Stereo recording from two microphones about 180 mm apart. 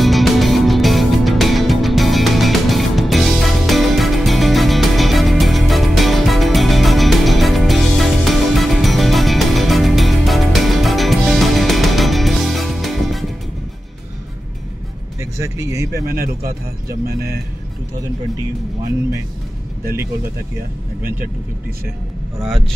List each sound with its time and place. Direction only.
0.0 s music: centre (ahead or behind)
15.1 s music: 15° right (ahead or behind)
15.9 s speech: 55° right (ahead or behind)